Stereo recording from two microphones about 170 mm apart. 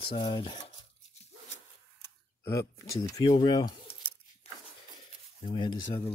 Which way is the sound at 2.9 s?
20° left (ahead or behind).